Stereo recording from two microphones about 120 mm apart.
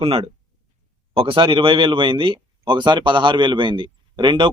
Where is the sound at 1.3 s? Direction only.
45° right (ahead or behind).